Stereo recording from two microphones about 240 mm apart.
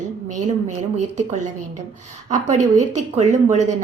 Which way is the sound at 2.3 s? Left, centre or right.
Right.